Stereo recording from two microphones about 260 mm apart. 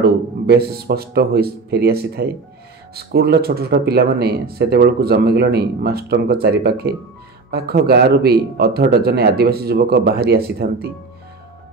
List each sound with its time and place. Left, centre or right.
0.0 s speech: right